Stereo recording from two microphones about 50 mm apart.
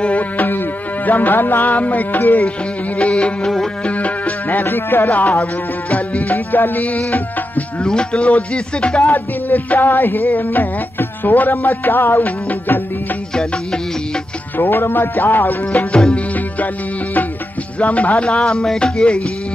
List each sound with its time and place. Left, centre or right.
0.0 s music: left
0.5 s music: left
3.0 s music: left
4.6 s speech: left
5.1 s speech: left
7.1 s music: left
7.8 s music: centre
9.0 s speech: left
13.3 s music: centre
14.6 s speech: left
15.7 s music: left
17.7 s music: left